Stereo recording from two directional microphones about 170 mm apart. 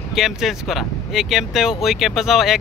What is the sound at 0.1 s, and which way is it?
Speech, centre (ahead or behind).